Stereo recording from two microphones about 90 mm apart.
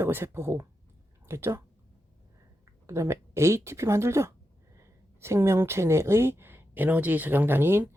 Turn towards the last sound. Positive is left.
turn(degrees=-25)  # may be behind; listen again after turning